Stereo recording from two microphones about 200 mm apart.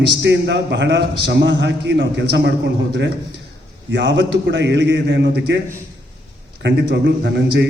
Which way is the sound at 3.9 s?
60° right (ahead or behind).